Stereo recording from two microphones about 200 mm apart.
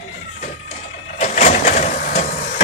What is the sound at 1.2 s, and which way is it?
Vehicle, 35° left (ahead or behind).